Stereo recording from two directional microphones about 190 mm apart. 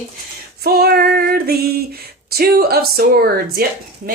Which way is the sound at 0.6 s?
55° right (ahead or behind).